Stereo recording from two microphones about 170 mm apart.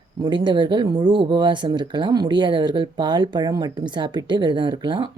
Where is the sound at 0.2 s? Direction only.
25° right (ahead or behind).